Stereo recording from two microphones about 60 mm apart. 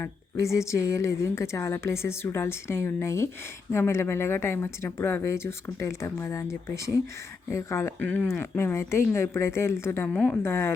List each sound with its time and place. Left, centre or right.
0.5 s a woman's voice: left
7.5 s speech: left
8.0 s speech: left
8.4 s a woman's voice: left
10.1 s speech: left
10.4 s a woman's voice: left